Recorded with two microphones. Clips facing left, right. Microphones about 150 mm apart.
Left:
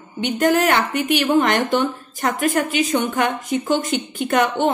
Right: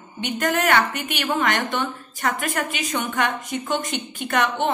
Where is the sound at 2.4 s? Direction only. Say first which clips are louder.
Left 7 dB; 35° left (ahead or behind).